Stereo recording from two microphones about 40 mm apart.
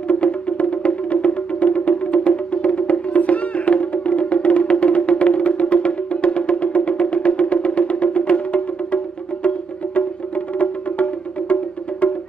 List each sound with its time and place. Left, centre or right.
0.1 s music: left